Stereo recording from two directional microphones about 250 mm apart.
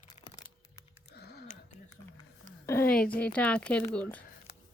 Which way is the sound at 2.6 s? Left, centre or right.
Centre.